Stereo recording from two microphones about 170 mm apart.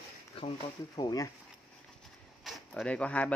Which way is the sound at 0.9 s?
25° left (ahead or behind).